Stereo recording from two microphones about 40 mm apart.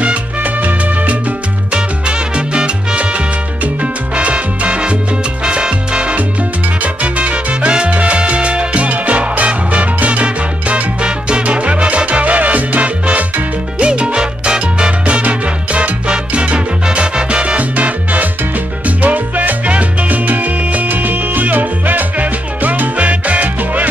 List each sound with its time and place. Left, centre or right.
0.0 s music: right
0.6 s music: right
1.7 s salsa music: right
13.7 s music: right